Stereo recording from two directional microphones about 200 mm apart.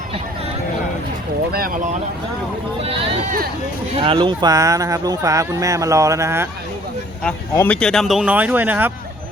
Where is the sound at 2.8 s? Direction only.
30° right (ahead or behind).